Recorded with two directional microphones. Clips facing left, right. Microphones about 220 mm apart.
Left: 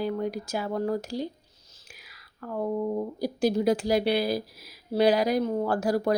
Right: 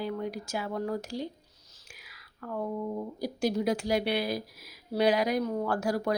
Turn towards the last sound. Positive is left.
turn(degrees=35)  # may be behind; listen again after turning